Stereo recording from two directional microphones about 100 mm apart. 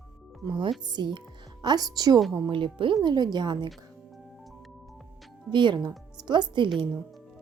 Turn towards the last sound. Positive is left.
turn(degrees=-50)  # may be behind; listen again after turning